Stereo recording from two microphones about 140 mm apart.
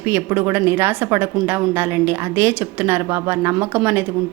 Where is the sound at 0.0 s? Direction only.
15° right (ahead or behind).